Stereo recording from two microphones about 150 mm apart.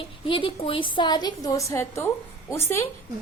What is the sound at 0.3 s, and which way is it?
A woman's voice, 35° left (ahead or behind).